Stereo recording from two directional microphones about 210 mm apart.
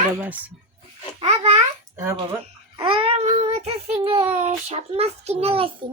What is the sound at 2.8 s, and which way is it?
A child's voice, 25° right (ahead or behind).